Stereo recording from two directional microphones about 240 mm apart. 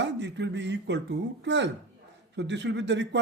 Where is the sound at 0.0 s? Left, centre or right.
Right.